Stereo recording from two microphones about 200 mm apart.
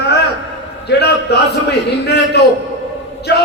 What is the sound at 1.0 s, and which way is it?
A man's voice, 55° left (ahead or behind).